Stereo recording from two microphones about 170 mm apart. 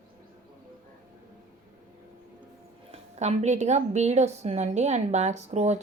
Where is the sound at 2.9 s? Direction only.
40° right (ahead or behind).